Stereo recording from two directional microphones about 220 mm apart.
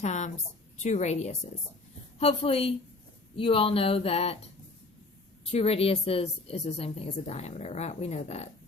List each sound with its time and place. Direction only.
0.0 s a sound: 30° left (ahead or behind)
0.8 s a woman's voice: 30° left (ahead or behind)
5.5 s a woman's voice: 25° left (ahead or behind)